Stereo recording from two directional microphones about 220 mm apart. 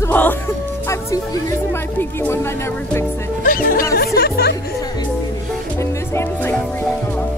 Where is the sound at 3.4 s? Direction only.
40° left (ahead or behind).